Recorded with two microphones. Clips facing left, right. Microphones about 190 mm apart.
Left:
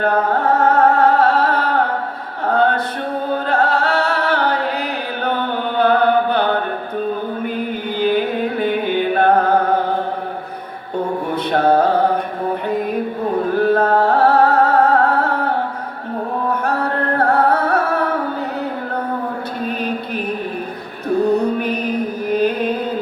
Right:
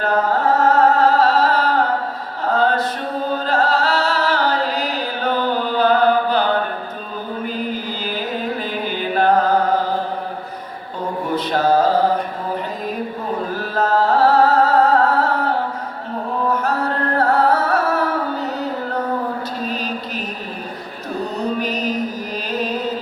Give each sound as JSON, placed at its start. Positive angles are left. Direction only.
{"t": 0.0, "sound": "music", "side_deg": 60}
{"t": 2.5, "sound": "a sound", "side_deg": 60}
{"t": 3.2, "sound": "music", "side_deg": 60}
{"t": 11.5, "sound": "music", "side_deg": 60}
{"t": 13.5, "sound": "music", "side_deg": 60}
{"t": 19.6, "sound": "a sound", "side_deg": 60}
{"t": 21.1, "sound": "music", "side_deg": 60}